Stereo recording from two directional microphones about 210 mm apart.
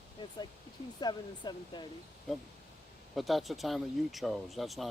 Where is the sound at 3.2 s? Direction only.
Centre (ahead or behind).